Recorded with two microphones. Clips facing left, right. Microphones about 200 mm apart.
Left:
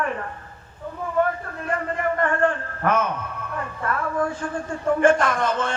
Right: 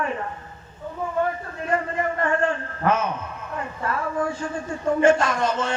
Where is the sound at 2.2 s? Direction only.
55° left (ahead or behind).